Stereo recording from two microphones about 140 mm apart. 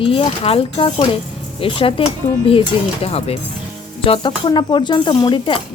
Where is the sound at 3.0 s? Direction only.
45° left (ahead or behind).